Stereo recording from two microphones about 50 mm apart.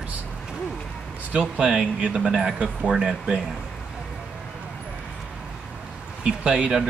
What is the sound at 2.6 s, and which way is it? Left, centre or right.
Speech, right.